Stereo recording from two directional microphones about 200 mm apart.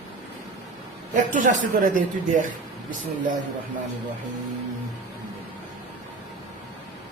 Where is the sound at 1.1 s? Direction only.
40° right (ahead or behind).